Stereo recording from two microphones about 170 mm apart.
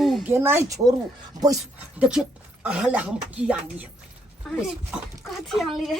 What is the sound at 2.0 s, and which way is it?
A woman's voice, 5° right (ahead or behind).